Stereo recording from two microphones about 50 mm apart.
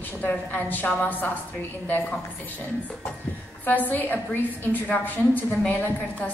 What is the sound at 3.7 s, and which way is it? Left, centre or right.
Speech, left.